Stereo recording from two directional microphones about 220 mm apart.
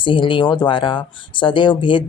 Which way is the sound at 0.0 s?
20° left (ahead or behind).